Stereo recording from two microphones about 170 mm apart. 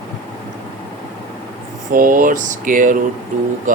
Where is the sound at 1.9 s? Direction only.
55° right (ahead or behind).